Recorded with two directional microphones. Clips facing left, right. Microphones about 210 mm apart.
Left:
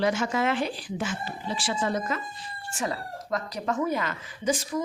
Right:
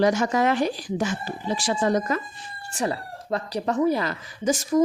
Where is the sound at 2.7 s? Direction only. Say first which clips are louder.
Right 4 dB; 35° right (ahead or behind).